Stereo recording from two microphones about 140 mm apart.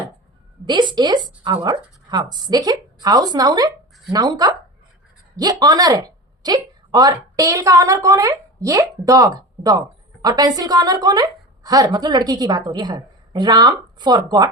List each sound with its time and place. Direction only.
0.6 s speech: 35° right (ahead or behind)